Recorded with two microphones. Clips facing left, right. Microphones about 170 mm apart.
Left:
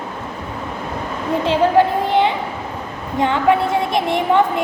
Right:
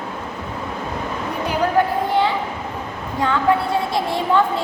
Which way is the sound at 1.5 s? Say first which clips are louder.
Left 4 dB; 25° left (ahead or behind).